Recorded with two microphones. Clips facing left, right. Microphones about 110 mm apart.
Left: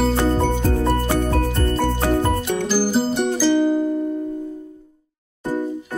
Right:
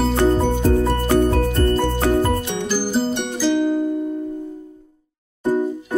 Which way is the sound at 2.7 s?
5° left (ahead or behind).